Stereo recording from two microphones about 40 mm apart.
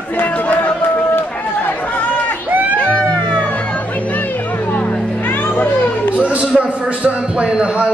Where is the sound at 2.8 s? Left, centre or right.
Left.